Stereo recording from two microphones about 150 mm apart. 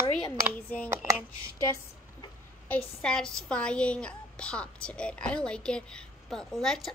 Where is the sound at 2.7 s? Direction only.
5° left (ahead or behind).